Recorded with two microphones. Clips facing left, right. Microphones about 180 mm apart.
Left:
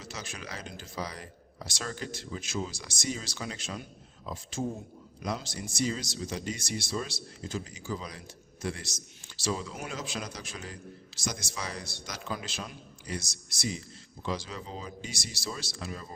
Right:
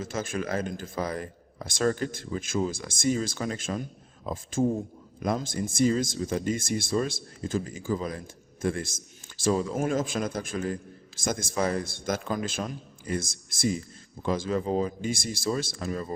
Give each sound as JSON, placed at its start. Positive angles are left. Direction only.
{"t": 0.0, "sound": "a man's voice", "side_deg": -50}